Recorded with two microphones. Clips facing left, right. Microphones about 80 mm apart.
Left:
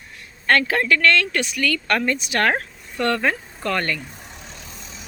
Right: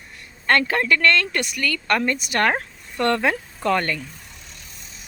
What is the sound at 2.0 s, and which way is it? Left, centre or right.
Speech, right.